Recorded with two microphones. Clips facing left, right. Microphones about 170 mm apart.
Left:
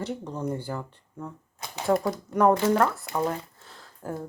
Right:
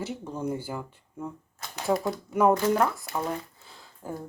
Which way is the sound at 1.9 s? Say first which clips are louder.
Left 2 dB; 5° right (ahead or behind).